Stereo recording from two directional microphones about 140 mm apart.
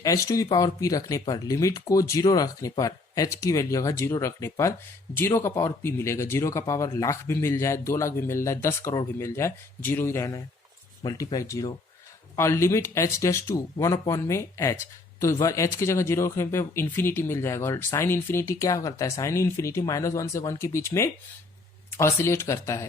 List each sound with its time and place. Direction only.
0.0 s speech: 25° left (ahead or behind)